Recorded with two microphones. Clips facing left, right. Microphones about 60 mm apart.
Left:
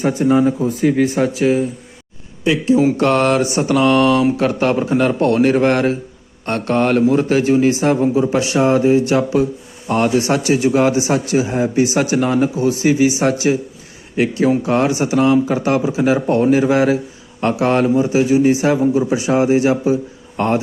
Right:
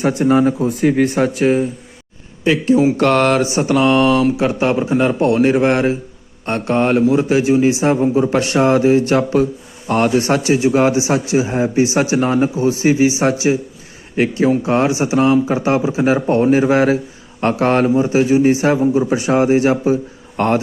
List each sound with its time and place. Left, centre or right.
0.0 s speech: right
3.0 s a man's voice: right
3.5 s a man's voice: right
8.3 s speech: right
9.0 s a man's voice: right